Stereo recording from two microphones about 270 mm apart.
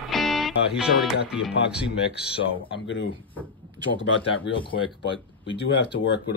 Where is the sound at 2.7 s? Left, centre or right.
Left.